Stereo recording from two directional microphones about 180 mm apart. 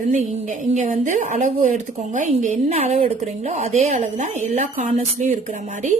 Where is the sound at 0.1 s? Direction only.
45° right (ahead or behind).